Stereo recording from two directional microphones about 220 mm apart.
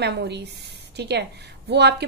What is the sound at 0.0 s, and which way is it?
A woman's voice, 50° right (ahead or behind).